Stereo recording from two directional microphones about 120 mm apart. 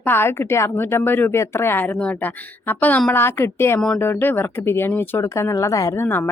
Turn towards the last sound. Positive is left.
turn(degrees=15)  # may be behind; listen again after turning